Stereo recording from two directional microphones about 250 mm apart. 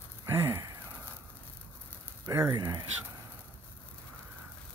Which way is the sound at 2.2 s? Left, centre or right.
Centre.